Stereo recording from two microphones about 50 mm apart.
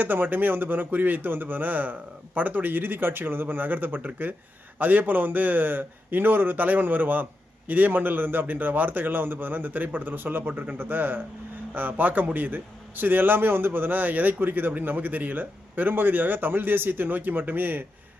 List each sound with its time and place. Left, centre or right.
0.0 s a man's voice: right